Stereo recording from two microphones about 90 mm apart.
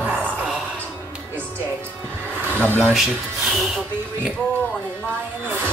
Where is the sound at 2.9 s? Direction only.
Centre (ahead or behind).